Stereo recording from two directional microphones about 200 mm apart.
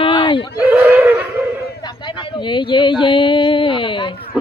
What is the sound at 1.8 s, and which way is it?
Speech, 25° left (ahead or behind).